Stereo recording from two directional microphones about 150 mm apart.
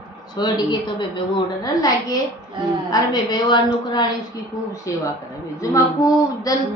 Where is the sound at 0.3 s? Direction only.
30° left (ahead or behind).